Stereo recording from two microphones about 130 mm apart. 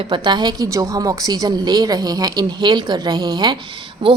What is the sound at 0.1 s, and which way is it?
A woman's voice, 35° right (ahead or behind).